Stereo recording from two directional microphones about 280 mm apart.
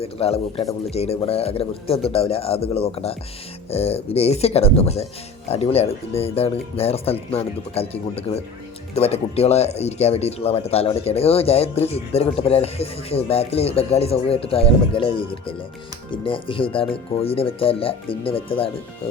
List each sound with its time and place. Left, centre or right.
0.0 s speech: left